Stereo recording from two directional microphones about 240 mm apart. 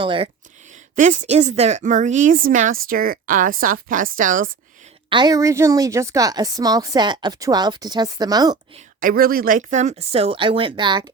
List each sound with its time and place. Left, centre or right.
0.0 s speech: right
0.9 s a woman's voice: right
5.0 s a woman's voice: centre
9.0 s speech: right; by 11.0 s centre